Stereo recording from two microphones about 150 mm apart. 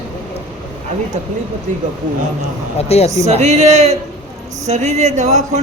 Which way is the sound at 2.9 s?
45° left (ahead or behind).